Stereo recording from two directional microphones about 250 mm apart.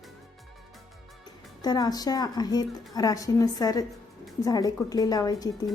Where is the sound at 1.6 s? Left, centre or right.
Centre.